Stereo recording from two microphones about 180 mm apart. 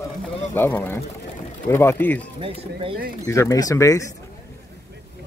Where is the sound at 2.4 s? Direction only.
30° right (ahead or behind).